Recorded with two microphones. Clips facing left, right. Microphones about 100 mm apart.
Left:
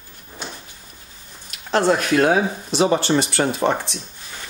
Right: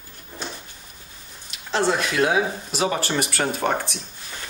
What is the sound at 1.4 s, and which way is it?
Speech, 50° left (ahead or behind).